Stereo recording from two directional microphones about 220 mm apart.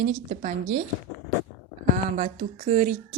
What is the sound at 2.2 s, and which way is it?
Speech, 35° right (ahead or behind).